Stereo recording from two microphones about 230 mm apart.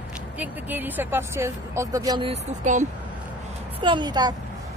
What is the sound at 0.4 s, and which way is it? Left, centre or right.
Speech, centre.